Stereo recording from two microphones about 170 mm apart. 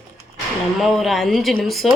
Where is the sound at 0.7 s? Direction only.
Centre (ahead or behind).